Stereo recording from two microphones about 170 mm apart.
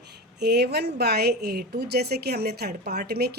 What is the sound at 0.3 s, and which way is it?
A woman's voice, 75° right (ahead or behind).